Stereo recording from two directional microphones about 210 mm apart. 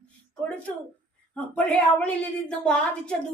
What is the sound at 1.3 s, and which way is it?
A woman's voice, 5° left (ahead or behind).